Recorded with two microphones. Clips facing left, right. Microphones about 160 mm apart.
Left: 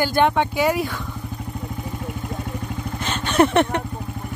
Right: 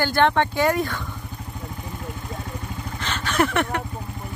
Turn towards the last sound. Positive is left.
turn(degrees=25)  # may be behind; listen again after turning